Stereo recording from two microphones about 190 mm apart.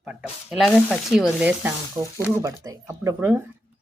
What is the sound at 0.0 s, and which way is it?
Speech, 5° right (ahead or behind).